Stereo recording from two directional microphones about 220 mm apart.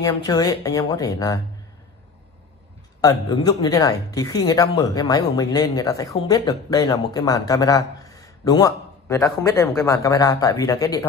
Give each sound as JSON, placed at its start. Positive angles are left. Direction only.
{"t": 0.0, "sound": "speech", "side_deg": 15}
{"t": 3.0, "sound": "speech", "side_deg": 20}